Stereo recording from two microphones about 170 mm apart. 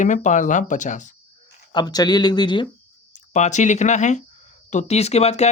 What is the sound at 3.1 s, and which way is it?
Speech, 45° left (ahead or behind).